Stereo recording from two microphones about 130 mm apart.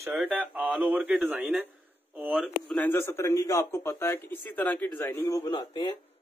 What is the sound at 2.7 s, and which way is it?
A man's voice, 15° left (ahead or behind).